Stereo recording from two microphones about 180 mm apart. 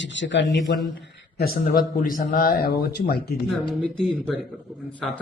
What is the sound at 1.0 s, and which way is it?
A man's voice, 60° left (ahead or behind).